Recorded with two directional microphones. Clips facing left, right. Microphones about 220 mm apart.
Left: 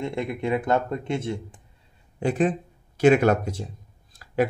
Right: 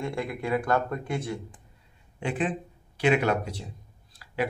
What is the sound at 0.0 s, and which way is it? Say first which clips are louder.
Speech: left 3 dB; 20° left (ahead or behind).